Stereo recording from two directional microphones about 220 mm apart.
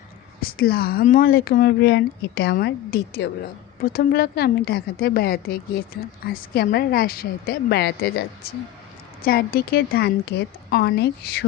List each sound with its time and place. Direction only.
0.4 s speech: 40° left (ahead or behind)